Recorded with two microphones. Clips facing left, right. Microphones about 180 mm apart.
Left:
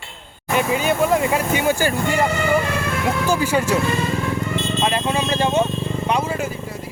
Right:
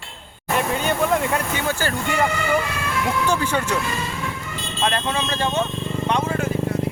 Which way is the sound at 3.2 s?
10° left (ahead or behind).